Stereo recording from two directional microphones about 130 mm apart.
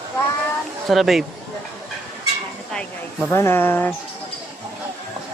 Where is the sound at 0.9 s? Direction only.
Centre (ahead or behind).